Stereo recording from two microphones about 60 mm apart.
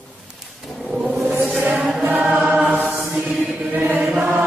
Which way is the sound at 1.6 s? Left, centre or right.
Right.